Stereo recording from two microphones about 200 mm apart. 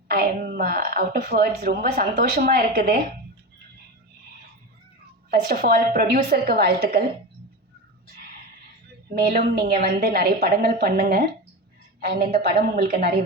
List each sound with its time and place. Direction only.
0.1 s a woman's voice: 45° right (ahead or behind)
5.3 s a woman's voice: 50° right (ahead or behind)
9.1 s a woman's voice: 50° right (ahead or behind)